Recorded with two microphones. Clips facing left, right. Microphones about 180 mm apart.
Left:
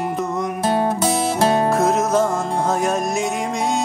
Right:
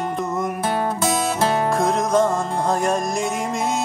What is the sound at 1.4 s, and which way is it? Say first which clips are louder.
Music: left 4 dB; 25° left (ahead or behind).